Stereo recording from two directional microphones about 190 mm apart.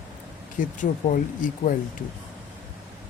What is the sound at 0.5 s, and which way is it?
Speech, 45° left (ahead or behind).